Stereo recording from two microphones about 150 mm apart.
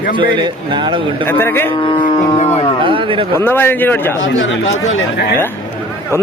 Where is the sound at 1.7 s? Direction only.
30° left (ahead or behind).